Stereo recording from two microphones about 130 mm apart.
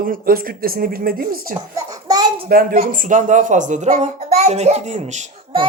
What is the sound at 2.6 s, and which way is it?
A child's voice, 90° right.